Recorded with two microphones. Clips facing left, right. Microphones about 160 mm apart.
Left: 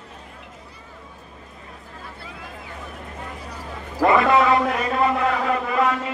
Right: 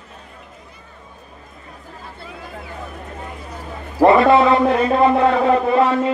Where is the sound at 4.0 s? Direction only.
30° right (ahead or behind).